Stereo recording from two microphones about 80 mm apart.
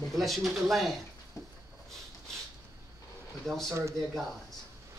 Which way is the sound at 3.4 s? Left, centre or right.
Centre.